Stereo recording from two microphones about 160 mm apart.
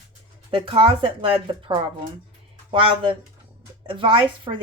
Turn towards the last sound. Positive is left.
turn(degrees=-35)  # may be behind; listen again after turning